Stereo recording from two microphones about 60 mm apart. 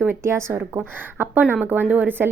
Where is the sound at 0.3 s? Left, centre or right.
Right.